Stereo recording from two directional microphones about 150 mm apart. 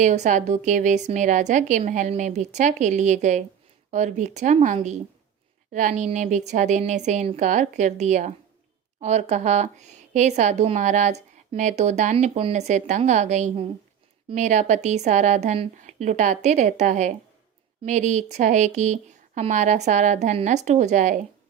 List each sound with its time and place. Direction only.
0.0 s a woman's voice: 55° right (ahead or behind)